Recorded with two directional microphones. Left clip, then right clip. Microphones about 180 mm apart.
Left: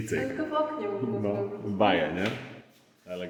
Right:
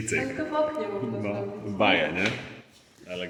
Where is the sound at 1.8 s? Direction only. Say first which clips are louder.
Right 2 dB; 25° left (ahead or behind).